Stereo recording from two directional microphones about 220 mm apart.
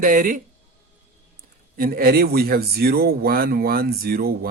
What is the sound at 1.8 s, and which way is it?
A man's voice, 40° right (ahead or behind).